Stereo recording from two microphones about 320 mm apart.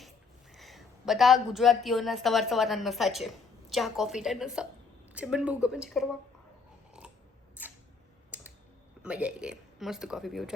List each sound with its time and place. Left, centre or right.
0.5 s a woman's voice: centre
7.0 s scissors: centre
7.6 s a sound: centre
8.3 s typing: centre
9.0 s speech: centre